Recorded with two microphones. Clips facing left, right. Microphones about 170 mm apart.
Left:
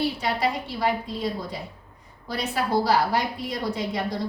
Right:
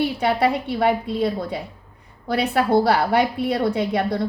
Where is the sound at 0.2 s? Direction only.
60° right (ahead or behind).